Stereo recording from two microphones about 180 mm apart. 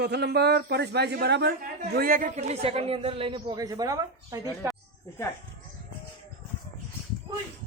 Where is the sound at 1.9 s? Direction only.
55° right (ahead or behind); by 4.4 s 20° right (ahead or behind).